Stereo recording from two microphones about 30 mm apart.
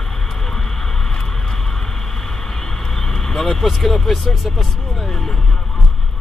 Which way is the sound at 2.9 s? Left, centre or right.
Centre.